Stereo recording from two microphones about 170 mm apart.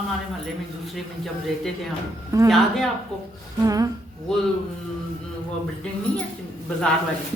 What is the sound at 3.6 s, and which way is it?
Speech, 20° right (ahead or behind).